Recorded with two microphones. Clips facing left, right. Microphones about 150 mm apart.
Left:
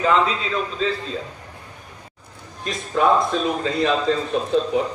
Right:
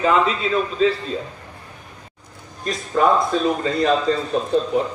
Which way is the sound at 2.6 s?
Centre (ahead or behind).